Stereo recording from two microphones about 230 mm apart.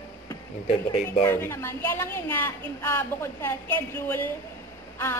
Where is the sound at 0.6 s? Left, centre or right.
Left.